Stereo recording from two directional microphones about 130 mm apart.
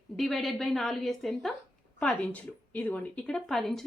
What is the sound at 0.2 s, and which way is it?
A woman's voice, centre (ahead or behind).